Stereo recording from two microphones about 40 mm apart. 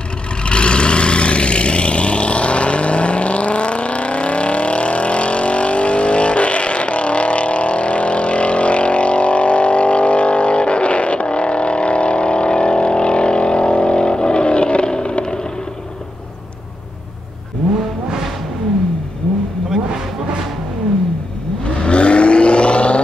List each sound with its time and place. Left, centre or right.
0.4 s vehicle: left
21.8 s vehicle: left